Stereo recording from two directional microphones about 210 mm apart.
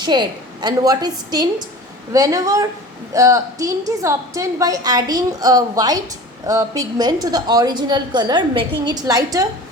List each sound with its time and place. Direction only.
0.0 s a woman's voice: 20° right (ahead or behind)